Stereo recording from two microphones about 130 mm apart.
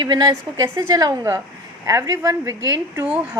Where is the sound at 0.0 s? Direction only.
35° right (ahead or behind).